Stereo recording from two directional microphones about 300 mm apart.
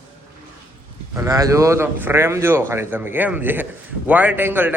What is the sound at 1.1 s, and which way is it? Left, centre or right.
A man's voice, centre.